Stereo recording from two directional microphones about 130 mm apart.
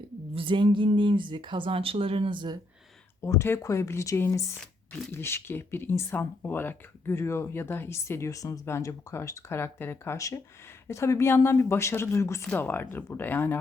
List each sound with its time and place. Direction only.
0.3 s speech: 40° right (ahead or behind)
3.2 s speech: 20° left (ahead or behind)